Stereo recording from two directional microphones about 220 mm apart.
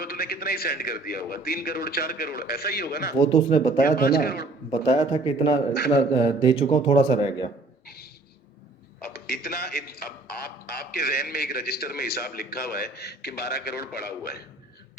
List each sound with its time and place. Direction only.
0.0 s a man's voice: 45° left (ahead or behind)
3.2 s a man's voice: 20° left (ahead or behind)
3.7 s a man's voice: 40° left (ahead or behind)
4.7 s a man's voice: 20° left (ahead or behind)
7.9 s a sound: 45° left (ahead or behind)
9.0 s a man's voice: 45° left (ahead or behind)